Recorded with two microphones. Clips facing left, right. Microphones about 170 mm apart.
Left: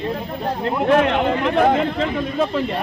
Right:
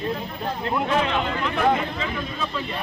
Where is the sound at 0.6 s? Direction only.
60° left (ahead or behind).